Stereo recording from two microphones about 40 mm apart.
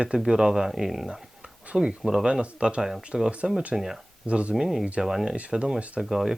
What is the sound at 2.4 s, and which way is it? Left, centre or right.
Speech, right.